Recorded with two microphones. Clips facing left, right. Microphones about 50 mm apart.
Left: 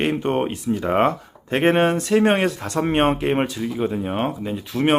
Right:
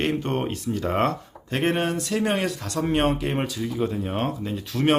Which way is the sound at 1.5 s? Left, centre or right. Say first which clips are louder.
Left 6 dB; left.